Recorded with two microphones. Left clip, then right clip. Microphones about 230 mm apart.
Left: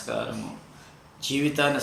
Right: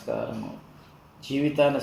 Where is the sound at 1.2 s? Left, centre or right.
Left.